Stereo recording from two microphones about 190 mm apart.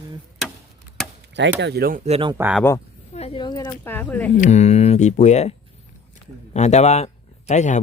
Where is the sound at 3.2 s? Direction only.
30° left (ahead or behind); by 4.3 s 10° left (ahead or behind).